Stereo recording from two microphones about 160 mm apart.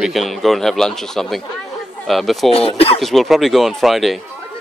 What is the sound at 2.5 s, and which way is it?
Speech, 35° left (ahead or behind).